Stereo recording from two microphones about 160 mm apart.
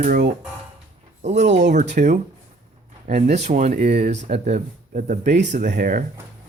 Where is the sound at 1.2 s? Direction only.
50° right (ahead or behind).